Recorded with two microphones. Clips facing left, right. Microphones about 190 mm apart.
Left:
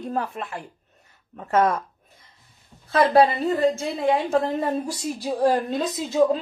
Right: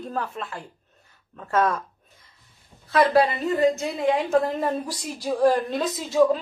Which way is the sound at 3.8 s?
30° left (ahead or behind).